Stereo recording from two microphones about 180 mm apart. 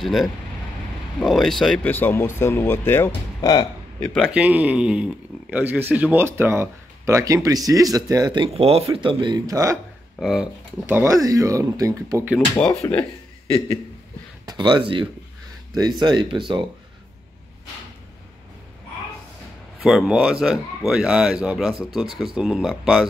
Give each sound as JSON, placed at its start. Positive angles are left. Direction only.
{"t": 0.0, "sound": "speech", "side_deg": 0}
{"t": 3.3, "sound": "speech", "side_deg": 20}
{"t": 4.0, "sound": "speech", "side_deg": 5}
{"t": 4.3, "sound": "speech", "side_deg": -5}
{"t": 10.2, "sound": "speech", "side_deg": -5}
{"t": 12.8, "sound": "speech", "side_deg": 15}
{"t": 14.4, "sound": "speech", "side_deg": -25}
{"t": 19.8, "sound": "speech", "side_deg": 0}